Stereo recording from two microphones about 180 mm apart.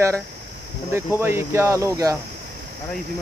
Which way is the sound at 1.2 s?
15° right (ahead or behind).